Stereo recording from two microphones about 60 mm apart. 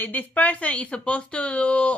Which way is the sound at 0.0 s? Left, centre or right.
Left.